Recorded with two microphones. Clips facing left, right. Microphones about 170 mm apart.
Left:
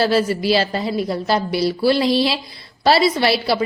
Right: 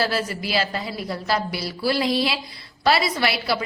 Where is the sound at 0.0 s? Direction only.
30° left (ahead or behind).